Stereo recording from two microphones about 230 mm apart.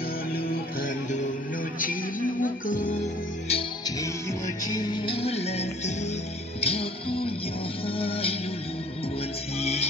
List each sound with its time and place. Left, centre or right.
0.3 s music: left
3.4 s music: left
9.6 s music: left